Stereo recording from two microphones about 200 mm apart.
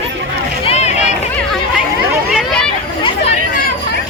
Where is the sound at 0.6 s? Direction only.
30° left (ahead or behind).